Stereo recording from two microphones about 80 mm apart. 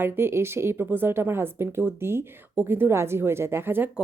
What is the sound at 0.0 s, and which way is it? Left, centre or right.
Speech, right.